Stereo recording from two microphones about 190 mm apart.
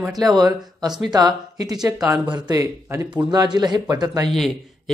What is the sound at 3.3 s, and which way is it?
A man's voice, 20° right (ahead or behind).